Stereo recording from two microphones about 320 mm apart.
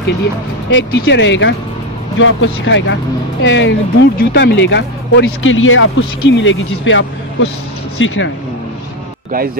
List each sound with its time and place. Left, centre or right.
0.7 s speech: left